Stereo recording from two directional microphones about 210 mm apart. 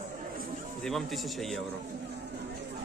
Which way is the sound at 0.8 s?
Centre (ahead or behind).